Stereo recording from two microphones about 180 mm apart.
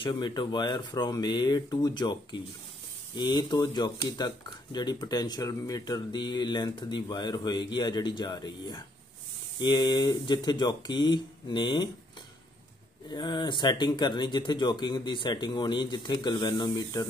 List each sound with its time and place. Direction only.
0.0 s speech: 25° left (ahead or behind)
13.1 s speech: 25° left (ahead or behind)